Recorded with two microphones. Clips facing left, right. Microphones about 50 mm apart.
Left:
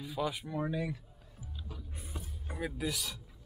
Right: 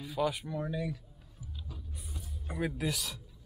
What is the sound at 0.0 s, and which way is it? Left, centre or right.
Speech, centre.